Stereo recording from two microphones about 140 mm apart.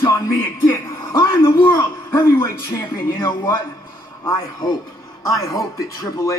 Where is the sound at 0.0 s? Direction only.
20° left (ahead or behind).